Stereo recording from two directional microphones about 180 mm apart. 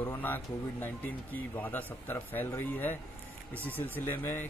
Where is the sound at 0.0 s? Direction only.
10° left (ahead or behind).